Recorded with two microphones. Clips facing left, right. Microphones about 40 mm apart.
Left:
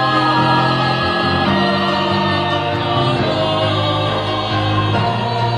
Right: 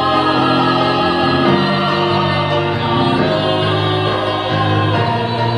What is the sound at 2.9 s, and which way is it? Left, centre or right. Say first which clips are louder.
Choir: right 4 dB; centre.